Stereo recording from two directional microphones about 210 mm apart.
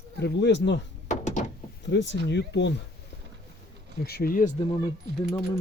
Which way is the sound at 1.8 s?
60° left (ahead or behind).